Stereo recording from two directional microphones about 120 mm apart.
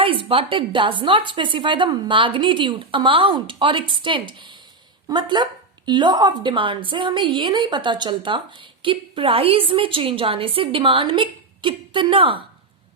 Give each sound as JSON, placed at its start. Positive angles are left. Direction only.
{"t": 0.0, "sound": "a woman's voice", "side_deg": -50}